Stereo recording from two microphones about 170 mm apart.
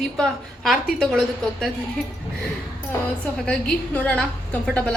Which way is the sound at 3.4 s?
10° left (ahead or behind).